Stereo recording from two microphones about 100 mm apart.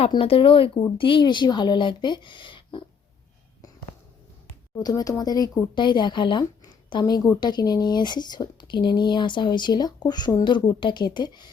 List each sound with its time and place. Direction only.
0.2 s speech: 65° left (ahead or behind)
4.8 s speech: 40° left (ahead or behind)
7.0 s speech: 35° left (ahead or behind)
7.3 s speech: 45° left (ahead or behind)